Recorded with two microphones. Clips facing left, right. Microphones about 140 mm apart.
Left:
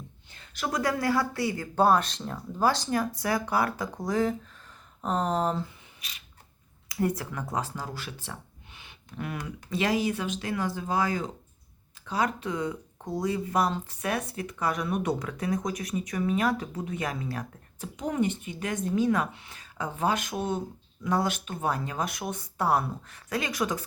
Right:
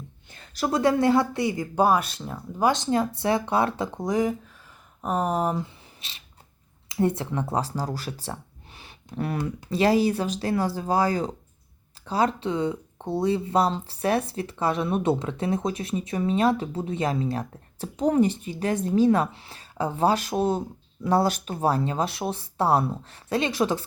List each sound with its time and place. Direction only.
0.5 s speech: 30° right (ahead or behind); by 5.6 s 10° right (ahead or behind)
6.0 s creak: 30° right (ahead or behind)
6.8 s speech: 25° right (ahead or behind)